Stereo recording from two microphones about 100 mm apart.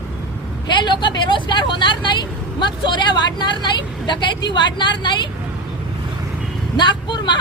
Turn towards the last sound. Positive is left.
turn(degrees=50)  # may be behind; listen again after turning